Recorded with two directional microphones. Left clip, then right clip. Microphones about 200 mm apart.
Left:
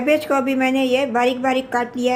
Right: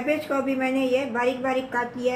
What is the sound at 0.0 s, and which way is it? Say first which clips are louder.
A woman's voice: left 7 dB; 50° left (ahead or behind).